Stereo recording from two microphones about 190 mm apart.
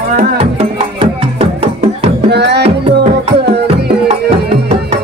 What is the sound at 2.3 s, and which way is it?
Music, 60° right (ahead or behind).